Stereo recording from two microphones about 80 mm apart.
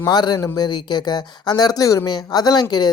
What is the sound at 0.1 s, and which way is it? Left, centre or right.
Speech, left.